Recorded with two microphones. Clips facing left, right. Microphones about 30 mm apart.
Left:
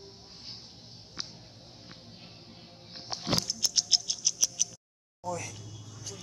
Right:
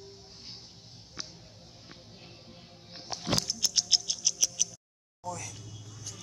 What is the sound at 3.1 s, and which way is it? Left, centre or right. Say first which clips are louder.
Music: even; left.